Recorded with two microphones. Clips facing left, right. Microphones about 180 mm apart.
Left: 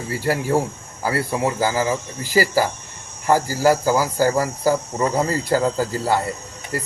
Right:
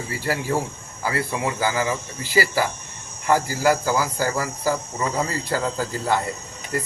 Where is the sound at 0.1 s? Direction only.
45° left (ahead or behind).